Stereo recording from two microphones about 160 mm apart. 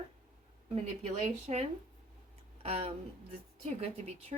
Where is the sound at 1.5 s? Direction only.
40° right (ahead or behind).